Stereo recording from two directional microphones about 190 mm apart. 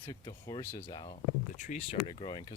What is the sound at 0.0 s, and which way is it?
Speech, 20° left (ahead or behind).